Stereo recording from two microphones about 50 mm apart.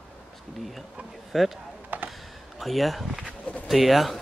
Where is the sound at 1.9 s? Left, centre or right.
Right.